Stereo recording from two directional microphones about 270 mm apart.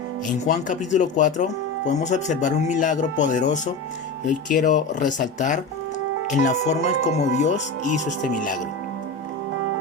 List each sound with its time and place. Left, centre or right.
0.4 s speech: left